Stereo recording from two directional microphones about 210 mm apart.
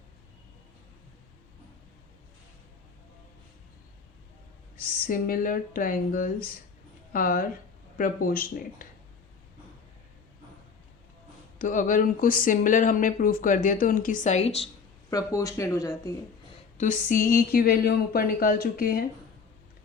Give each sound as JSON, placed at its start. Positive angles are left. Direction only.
{"t": 4.8, "sound": "speech", "side_deg": 45}
{"t": 11.6, "sound": "speech", "side_deg": 40}
{"t": 15.1, "sound": "speech", "side_deg": 15}
{"t": 16.7, "sound": "speech", "side_deg": 35}